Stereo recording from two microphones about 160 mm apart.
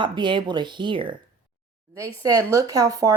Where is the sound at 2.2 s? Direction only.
20° right (ahead or behind).